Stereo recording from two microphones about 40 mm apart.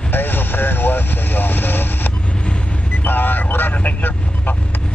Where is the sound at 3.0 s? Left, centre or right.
Left.